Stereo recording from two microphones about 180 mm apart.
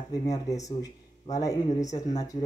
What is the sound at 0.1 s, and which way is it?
Speech, 20° left (ahead or behind).